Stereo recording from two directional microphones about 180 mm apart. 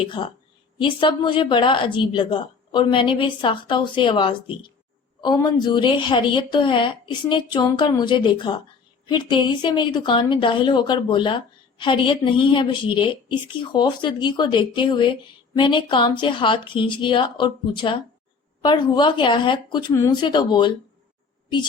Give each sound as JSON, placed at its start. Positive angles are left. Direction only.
{"t": 0.2, "sound": "a woman's voice", "side_deg": 25}